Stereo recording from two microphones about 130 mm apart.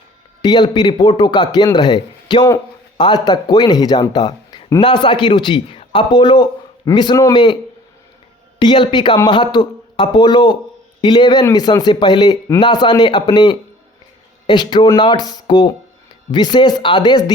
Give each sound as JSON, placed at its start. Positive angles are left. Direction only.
{"t": 0.4, "sound": "speech", "side_deg": 35}
{"t": 8.5, "sound": "a woman's voice", "side_deg": 35}